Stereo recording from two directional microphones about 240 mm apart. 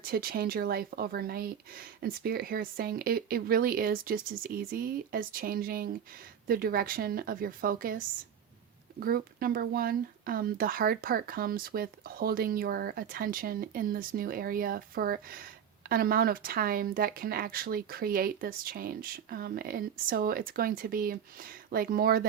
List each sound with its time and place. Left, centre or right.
0.0 s speech: right